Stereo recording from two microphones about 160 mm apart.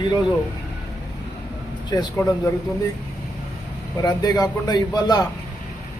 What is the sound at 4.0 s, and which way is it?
A man's voice, 25° left (ahead or behind).